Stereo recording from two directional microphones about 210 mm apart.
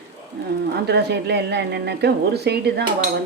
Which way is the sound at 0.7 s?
50° right (ahead or behind).